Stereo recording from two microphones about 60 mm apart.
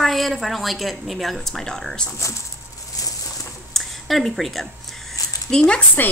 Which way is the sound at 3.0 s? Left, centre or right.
Left.